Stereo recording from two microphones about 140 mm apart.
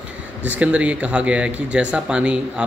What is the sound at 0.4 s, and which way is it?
Speech, 10° right (ahead or behind).